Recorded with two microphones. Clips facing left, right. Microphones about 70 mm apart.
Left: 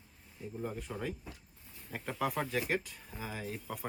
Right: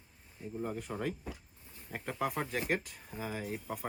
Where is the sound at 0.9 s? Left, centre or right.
Right.